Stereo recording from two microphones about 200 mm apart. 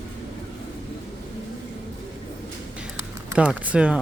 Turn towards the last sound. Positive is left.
turn(degrees=-5)  # may be behind; listen again after turning